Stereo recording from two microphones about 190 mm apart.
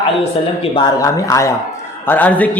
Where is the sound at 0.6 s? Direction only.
20° left (ahead or behind).